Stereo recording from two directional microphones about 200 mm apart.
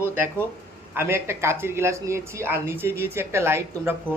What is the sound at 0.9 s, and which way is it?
Speech, 15° right (ahead or behind).